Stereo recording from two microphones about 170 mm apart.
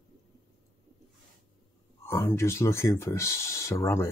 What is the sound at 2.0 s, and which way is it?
Speech, 15° left (ahead or behind).